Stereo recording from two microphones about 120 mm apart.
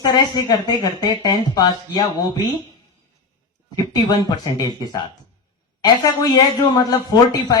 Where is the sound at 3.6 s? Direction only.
35° left (ahead or behind).